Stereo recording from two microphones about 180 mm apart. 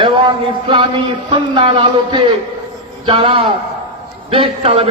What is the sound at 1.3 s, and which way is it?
A man's voice, 25° right (ahead or behind).